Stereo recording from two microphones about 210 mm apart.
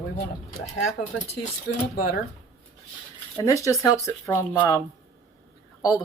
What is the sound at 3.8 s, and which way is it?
Speech, 15° left (ahead or behind).